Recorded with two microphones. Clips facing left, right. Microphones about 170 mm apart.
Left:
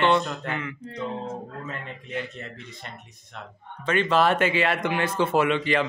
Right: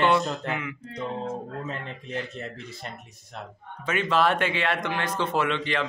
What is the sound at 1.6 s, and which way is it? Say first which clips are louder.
Speech: right 1 dB; 30° right (ahead or behind).